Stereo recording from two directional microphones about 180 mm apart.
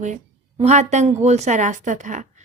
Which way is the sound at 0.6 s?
40° right (ahead or behind).